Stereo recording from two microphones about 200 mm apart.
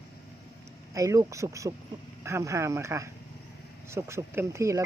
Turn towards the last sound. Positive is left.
turn(degrees=-15)  # may be behind; listen again after turning